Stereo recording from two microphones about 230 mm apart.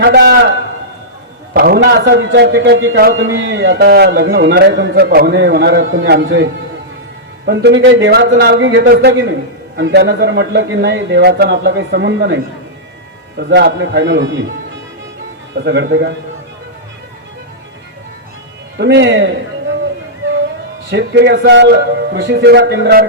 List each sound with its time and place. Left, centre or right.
0.0 s a man's voice: right
1.5 s a man's voice: right
8.8 s a man's voice: right
13.4 s a man's voice: right
15.5 s a man's voice: right
18.8 s a man's voice: right
20.9 s a man's voice: right